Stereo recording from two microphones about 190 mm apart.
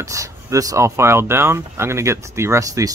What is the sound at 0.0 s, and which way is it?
Speech, 15° right (ahead or behind).